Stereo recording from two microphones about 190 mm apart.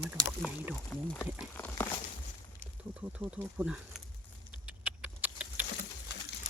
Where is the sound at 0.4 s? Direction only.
5° right (ahead or behind).